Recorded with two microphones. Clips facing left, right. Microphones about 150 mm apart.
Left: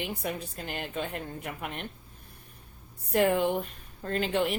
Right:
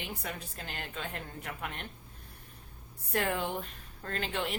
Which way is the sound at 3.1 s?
15° left (ahead or behind).